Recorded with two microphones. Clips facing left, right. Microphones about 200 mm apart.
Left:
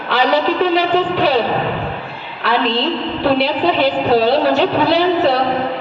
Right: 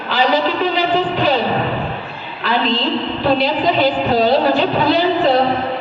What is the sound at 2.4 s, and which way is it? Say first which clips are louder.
A woman's voice: left 1 dB; 65° left (ahead or behind).